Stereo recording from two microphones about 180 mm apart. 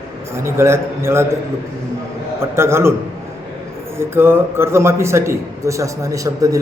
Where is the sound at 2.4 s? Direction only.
15° right (ahead or behind).